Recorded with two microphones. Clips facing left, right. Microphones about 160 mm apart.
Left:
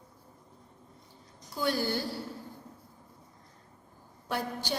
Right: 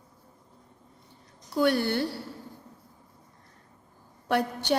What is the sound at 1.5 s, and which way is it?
Speech, 60° right (ahead or behind).